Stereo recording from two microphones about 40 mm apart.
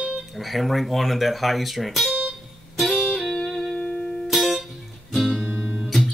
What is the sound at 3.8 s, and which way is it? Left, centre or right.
Music, centre.